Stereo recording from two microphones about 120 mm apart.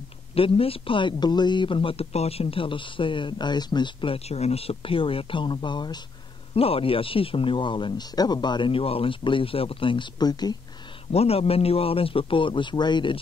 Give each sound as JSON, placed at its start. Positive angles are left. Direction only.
{"t": 0.3, "sound": "speech", "side_deg": 50}
{"t": 6.5, "sound": "speech", "side_deg": 50}
{"t": 11.1, "sound": "speech", "side_deg": 60}